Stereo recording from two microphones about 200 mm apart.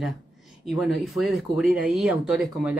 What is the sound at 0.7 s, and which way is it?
Speech, centre (ahead or behind).